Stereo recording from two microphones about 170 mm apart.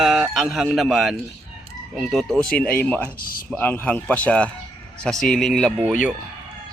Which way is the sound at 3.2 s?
60° left (ahead or behind).